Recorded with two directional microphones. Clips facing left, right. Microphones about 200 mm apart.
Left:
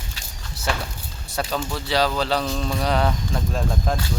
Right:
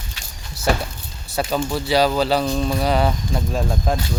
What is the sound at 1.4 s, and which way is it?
Speech, 10° right (ahead or behind).